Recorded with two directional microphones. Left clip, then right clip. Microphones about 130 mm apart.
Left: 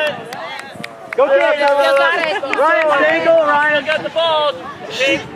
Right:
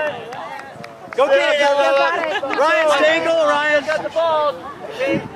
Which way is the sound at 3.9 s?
15° left (ahead or behind).